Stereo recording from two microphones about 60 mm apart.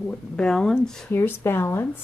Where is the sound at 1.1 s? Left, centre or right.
Left.